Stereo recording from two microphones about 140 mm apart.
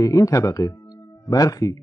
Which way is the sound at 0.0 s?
25° left (ahead or behind).